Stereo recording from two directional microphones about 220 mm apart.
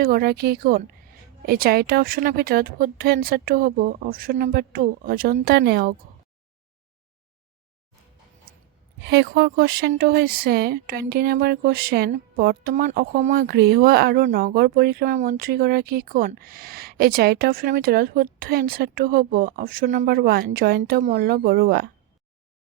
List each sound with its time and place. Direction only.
0.0 s speech: 45° right (ahead or behind)
8.5 s sigh: 40° right (ahead or behind)
9.0 s speech: 50° right (ahead or behind)